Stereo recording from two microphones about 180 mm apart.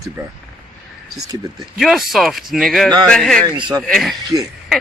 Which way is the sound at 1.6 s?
Centre (ahead or behind).